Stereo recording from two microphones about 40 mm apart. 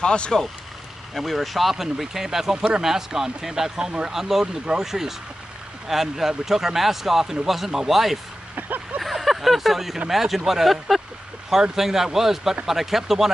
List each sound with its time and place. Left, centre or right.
0.0 s speech: left
1.1 s speech: centre; by 4.1 s right
4.1 s speech: centre
8.5 s vehicle: right
9.0 s a sound: centre
9.9 s speech: centre